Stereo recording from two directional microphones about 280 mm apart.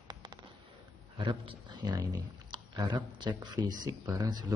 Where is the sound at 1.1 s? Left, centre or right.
Centre.